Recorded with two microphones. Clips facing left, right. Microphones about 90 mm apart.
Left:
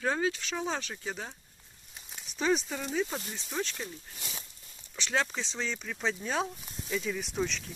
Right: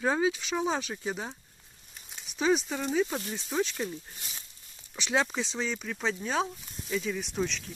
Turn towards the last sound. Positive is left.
turn(degrees=0)  # may be behind; listen again after turning